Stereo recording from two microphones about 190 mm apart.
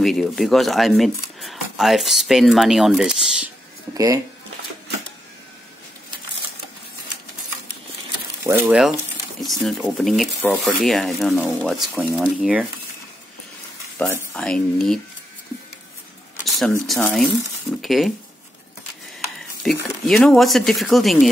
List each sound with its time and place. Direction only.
0.0 s speech: centre (ahead or behind)
3.9 s speech: 20° right (ahead or behind)
8.5 s speech: 10° right (ahead or behind)
13.9 s speech: 5° left (ahead or behind)
16.4 s speech: centre (ahead or behind)
19.6 s speech: 5° left (ahead or behind)